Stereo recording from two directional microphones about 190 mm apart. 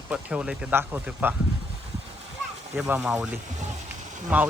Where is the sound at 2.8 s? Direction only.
10° right (ahead or behind).